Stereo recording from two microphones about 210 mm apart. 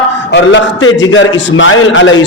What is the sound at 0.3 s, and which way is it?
A man's voice, 60° left (ahead or behind).